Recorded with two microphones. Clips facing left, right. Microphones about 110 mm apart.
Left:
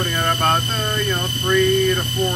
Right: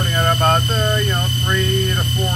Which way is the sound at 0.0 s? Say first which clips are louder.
Right 2 dB; 15° right (ahead or behind).